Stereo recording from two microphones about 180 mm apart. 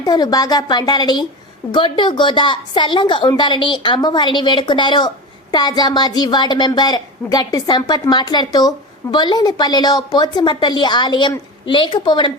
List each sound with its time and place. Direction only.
0.0 s a woman's voice: 20° left (ahead or behind)